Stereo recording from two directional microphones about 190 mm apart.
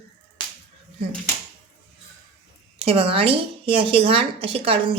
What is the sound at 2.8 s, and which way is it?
A woman's voice, 30° right (ahead or behind).